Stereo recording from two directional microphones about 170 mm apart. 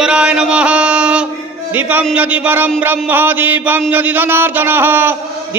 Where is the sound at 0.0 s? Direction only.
5° right (ahead or behind).